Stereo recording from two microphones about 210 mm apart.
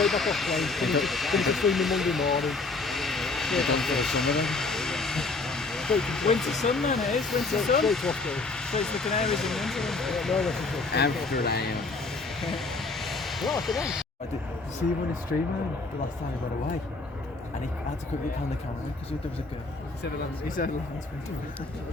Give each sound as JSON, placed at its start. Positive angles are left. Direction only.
{"t": 0.0, "sound": "speech", "side_deg": 0}
{"t": 11.4, "sound": "speech", "side_deg": 50}
{"t": 12.4, "sound": "vehicle", "side_deg": 0}
{"t": 20.6, "sound": "speech", "side_deg": 40}